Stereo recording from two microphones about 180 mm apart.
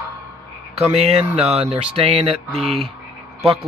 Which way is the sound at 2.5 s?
Centre (ahead or behind).